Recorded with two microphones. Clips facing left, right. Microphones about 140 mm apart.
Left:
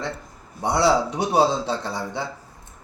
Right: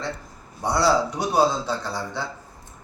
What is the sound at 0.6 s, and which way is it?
A man's voice, 25° left (ahead or behind).